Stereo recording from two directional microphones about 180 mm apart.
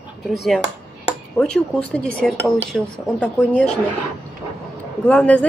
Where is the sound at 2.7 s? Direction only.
5° left (ahead or behind).